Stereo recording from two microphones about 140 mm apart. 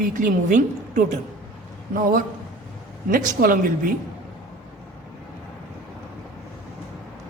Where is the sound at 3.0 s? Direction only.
85° right.